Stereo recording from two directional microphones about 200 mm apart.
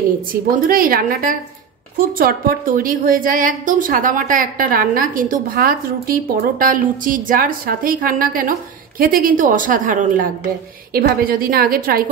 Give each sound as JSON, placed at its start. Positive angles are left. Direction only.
{"t": 0.3, "sound": "a woman's voice", "side_deg": -45}